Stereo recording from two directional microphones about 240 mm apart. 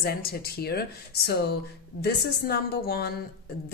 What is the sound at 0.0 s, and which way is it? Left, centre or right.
A woman's voice, left.